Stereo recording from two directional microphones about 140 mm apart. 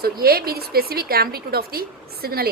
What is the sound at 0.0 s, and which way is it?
A woman's voice, 90° right.